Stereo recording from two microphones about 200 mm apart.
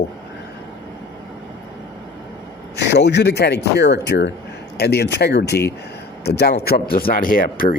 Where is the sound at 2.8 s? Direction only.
60° left (ahead or behind).